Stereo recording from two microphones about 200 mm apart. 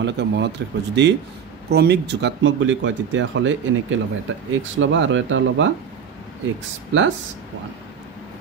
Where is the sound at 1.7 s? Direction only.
55° right (ahead or behind).